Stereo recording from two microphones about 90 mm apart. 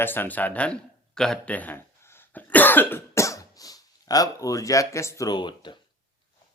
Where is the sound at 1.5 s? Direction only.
20° left (ahead or behind).